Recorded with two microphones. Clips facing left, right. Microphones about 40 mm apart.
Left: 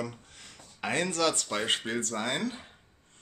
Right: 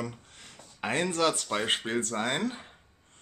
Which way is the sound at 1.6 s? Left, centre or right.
Right.